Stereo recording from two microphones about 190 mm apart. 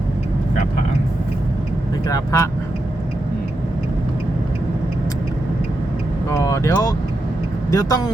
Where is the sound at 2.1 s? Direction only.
15° left (ahead or behind).